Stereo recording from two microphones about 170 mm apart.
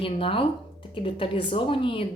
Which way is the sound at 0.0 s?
30° left (ahead or behind).